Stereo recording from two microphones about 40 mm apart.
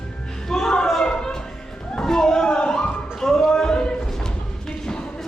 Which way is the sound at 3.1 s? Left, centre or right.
Centre.